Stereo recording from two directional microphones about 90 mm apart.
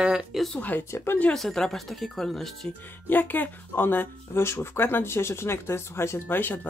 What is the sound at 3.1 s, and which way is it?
Speech, 20° left (ahead or behind).